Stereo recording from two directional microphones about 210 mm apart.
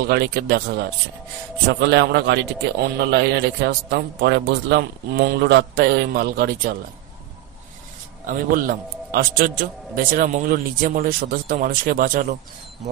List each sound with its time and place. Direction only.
0.1 s a man's voice: 50° right (ahead or behind)
8.3 s a man's voice: 40° right (ahead or behind)